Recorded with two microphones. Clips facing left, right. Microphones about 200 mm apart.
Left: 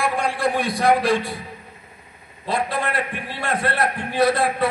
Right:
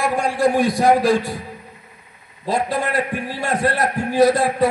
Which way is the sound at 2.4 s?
40° right (ahead or behind).